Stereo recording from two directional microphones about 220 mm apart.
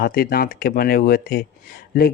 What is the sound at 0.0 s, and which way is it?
Speech, 45° left (ahead or behind).